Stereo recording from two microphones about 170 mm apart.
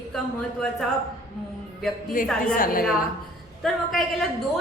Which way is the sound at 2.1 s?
55° left (ahead or behind).